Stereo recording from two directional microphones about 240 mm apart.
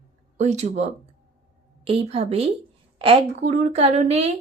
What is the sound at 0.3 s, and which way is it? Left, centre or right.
Speech, right.